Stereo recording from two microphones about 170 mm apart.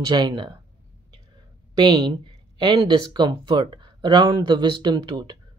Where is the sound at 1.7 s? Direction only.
25° right (ahead or behind).